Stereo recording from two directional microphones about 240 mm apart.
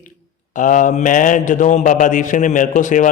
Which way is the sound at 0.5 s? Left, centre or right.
Left.